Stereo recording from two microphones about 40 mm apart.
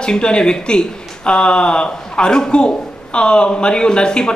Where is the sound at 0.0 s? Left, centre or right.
Left.